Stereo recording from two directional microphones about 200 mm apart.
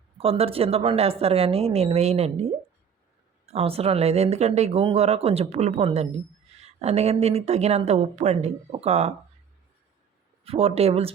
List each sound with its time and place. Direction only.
0.2 s a woman's voice: 30° right (ahead or behind)
10.4 s a woman's voice: 30° right (ahead or behind)